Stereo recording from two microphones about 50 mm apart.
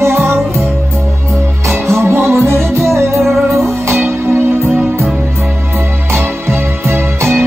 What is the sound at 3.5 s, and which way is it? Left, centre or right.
Music, centre.